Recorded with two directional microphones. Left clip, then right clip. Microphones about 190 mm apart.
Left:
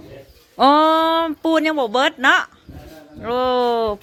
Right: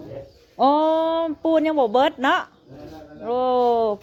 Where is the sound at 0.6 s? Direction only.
25° left (ahead or behind); by 2.5 s 5° left (ahead or behind).